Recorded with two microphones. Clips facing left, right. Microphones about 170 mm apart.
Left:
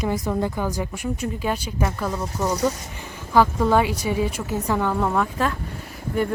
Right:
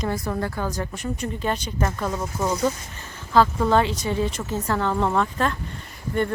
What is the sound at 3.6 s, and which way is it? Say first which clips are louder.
Speech: left 1 dB; 10° left (ahead or behind).